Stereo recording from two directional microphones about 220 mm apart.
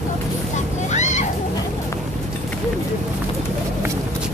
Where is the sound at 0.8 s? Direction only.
30° left (ahead or behind).